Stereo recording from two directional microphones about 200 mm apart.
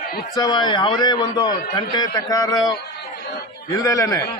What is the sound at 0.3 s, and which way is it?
A man's voice, 20° left (ahead or behind).